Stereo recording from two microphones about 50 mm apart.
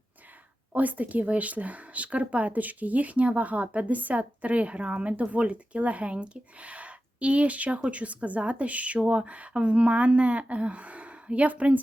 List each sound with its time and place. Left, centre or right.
0.7 s speech: right